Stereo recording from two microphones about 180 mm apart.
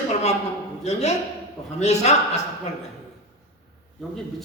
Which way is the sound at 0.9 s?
40° left (ahead or behind).